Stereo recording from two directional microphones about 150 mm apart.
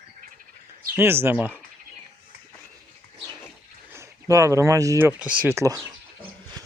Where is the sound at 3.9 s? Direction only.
20° right (ahead or behind).